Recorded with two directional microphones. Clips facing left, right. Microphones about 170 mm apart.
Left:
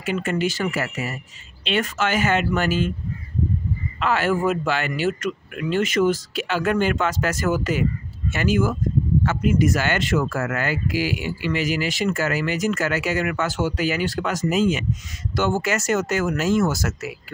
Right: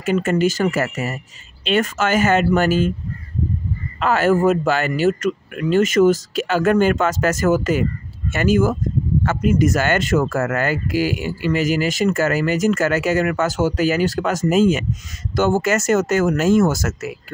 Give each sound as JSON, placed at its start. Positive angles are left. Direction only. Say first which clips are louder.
{"t": 0.0, "sound": "speech", "louder": "right 6 dB", "side_deg": -45}
{"t": 4.0, "sound": "speech", "louder": "right 5 dB", "side_deg": -45}